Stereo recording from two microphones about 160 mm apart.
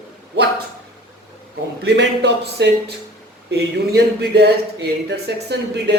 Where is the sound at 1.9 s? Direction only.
90° right.